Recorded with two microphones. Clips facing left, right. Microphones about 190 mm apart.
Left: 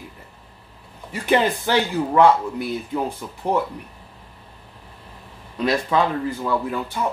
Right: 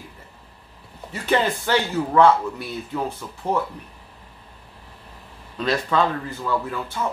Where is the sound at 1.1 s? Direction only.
15° left (ahead or behind).